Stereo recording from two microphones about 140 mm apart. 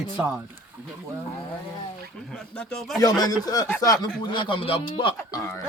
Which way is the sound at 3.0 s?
25° left (ahead or behind).